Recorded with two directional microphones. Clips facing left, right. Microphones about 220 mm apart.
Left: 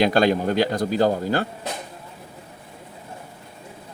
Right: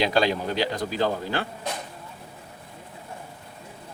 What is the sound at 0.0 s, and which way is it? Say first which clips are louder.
A man's voice: left 5 dB; 50° left (ahead or behind).